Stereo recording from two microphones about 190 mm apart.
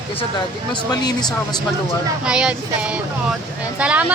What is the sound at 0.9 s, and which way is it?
Speech, 20° left (ahead or behind).